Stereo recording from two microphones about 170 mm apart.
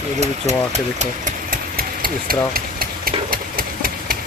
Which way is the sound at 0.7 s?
45° right (ahead or behind).